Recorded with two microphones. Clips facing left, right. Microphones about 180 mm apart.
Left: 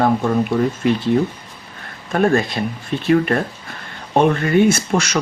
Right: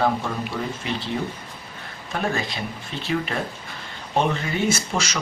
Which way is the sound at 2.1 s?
55° left (ahead or behind).